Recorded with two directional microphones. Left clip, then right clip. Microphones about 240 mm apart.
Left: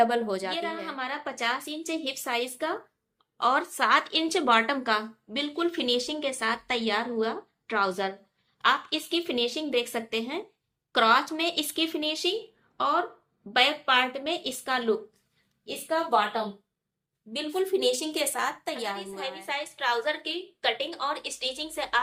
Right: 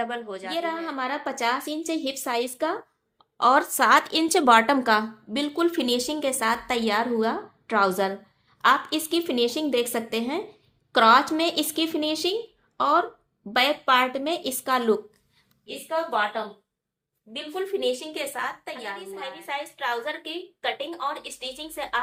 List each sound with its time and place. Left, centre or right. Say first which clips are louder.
0.0 s a woman's voice: left 6 dB; left
0.5 s speech: right 4 dB; right
15.6 s a woman's voice: right 1 dB; left
17.3 s a woman's voice: left 2 dB; left
19.2 s a woman's voice: right 1 dB; centre